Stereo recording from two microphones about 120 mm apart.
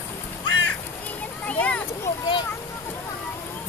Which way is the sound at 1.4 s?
10° left (ahead or behind).